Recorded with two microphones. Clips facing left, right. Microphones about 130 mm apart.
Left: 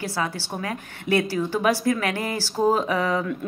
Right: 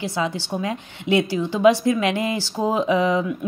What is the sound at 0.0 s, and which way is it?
A woman's voice, 20° right (ahead or behind).